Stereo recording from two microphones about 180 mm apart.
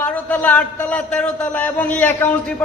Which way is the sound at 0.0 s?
10° left (ahead or behind).